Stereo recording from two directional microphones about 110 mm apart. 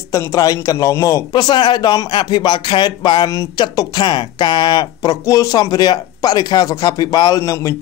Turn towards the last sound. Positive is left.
turn(degrees=30)  # may be behind; listen again after turning